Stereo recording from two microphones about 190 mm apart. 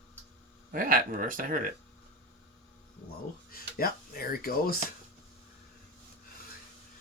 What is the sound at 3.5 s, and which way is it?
Speech, 50° left (ahead or behind).